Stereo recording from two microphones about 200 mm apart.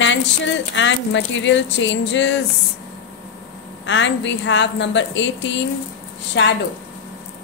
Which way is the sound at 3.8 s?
65° left (ahead or behind).